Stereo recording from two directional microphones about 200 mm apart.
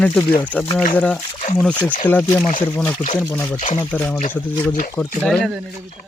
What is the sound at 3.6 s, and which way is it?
Speech, 40° left (ahead or behind).